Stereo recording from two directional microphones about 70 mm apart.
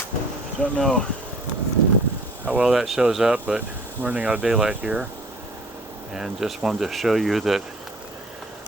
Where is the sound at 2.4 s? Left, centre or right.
Right.